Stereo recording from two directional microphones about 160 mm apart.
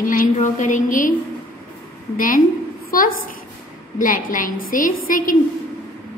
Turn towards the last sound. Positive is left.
turn(degrees=60)  # may be behind; listen again after turning